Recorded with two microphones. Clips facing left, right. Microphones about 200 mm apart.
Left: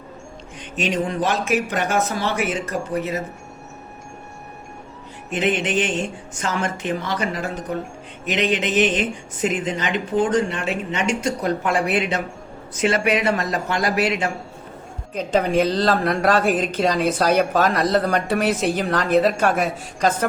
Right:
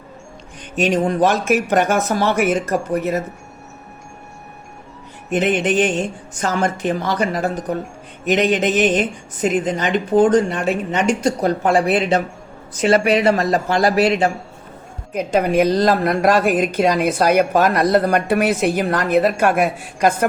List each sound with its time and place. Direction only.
0.8 s speech: 45° right (ahead or behind)
5.3 s speech: 45° right (ahead or behind)
15.1 s speech: 10° right (ahead or behind)